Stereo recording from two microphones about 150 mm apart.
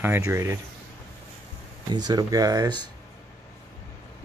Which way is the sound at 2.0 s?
25° right (ahead or behind).